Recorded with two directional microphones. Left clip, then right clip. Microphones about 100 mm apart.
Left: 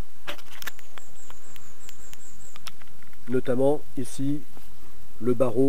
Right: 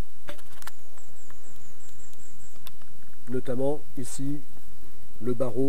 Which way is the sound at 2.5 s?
30° left (ahead or behind).